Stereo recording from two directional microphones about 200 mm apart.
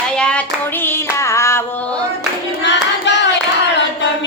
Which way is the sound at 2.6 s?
60° left (ahead or behind).